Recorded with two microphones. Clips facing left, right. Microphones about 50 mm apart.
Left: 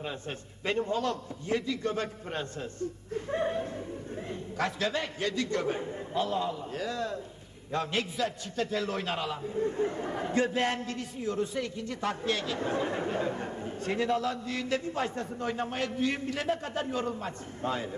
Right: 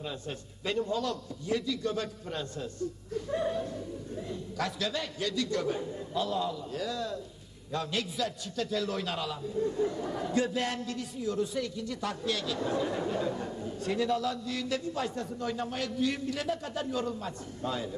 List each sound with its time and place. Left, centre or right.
0.0 s a man's voice: left